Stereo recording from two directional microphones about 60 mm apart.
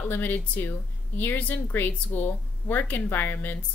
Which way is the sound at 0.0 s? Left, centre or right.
Left.